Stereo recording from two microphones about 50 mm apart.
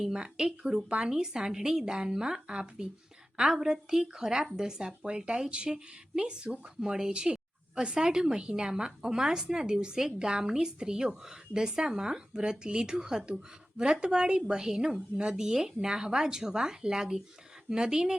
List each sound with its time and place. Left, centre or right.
0.0 s speech: centre